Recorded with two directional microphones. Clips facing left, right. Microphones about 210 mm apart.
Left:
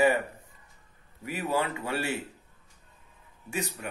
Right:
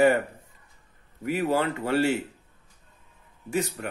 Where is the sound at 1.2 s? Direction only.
45° right (ahead or behind).